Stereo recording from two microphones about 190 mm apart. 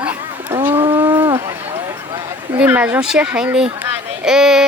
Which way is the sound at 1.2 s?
25° right (ahead or behind).